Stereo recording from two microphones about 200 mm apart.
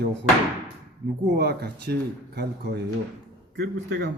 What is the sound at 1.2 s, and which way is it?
Speech, 55° right (ahead or behind).